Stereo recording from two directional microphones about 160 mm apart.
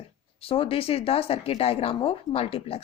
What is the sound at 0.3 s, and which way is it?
Speech, 35° left (ahead or behind).